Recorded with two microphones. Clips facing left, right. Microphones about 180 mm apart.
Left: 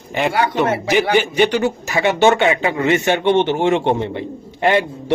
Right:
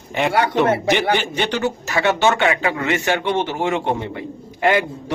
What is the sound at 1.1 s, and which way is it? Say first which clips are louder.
Speech: left 6 dB; 10° left (ahead or behind).